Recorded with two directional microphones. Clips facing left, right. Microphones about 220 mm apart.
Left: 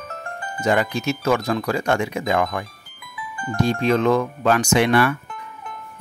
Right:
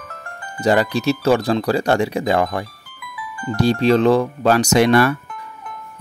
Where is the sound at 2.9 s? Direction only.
25° left (ahead or behind).